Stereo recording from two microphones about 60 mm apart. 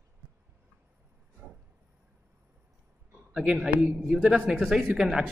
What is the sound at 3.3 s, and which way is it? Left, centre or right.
Speech, centre.